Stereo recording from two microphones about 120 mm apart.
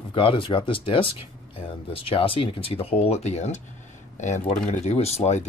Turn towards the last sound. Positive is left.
turn(degrees=65)  # may be behind; listen again after turning